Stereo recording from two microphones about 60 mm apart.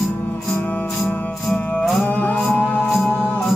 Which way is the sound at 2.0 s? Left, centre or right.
Left.